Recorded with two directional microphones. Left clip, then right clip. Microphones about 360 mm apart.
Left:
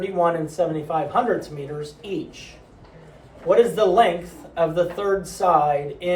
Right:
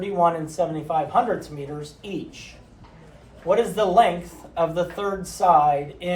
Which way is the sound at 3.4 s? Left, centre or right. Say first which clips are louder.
Left 4 dB; centre.